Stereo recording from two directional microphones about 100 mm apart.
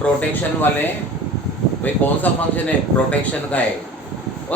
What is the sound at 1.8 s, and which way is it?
Speech, 15° left (ahead or behind).